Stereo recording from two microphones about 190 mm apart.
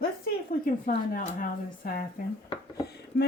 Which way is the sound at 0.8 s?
45° left (ahead or behind).